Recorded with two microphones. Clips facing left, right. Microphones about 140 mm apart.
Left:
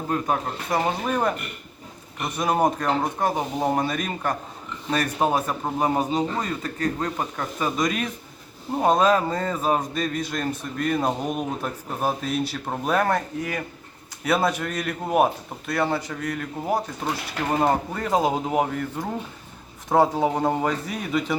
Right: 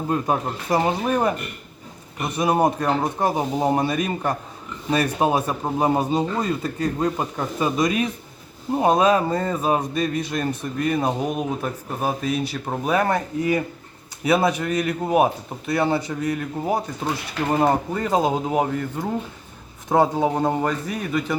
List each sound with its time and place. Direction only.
1.0 s speech: 10° right (ahead or behind)